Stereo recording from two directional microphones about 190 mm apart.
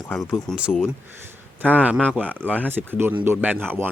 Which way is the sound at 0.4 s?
5° right (ahead or behind).